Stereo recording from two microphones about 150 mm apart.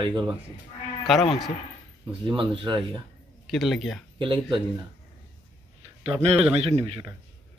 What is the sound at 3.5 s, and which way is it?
Speech, centre (ahead or behind).